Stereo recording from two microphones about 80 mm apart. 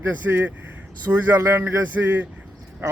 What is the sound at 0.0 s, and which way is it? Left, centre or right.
Speech, right.